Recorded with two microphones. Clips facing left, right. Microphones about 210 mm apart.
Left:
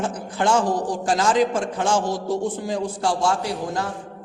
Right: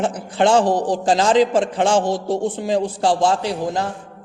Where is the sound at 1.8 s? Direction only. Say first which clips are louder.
Right 4 dB; 30° right (ahead or behind).